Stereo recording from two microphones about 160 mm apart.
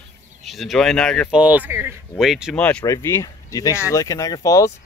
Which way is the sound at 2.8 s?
15° left (ahead or behind).